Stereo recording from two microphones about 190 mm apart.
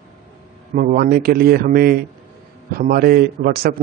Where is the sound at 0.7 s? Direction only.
50° right (ahead or behind).